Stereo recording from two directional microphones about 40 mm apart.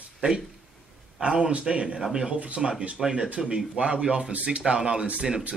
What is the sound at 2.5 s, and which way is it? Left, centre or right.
Speech, right.